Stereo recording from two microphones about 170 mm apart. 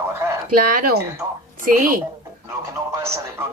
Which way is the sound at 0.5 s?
55° right (ahead or behind).